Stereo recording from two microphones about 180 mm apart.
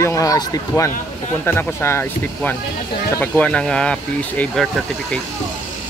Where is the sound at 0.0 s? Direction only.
20° left (ahead or behind).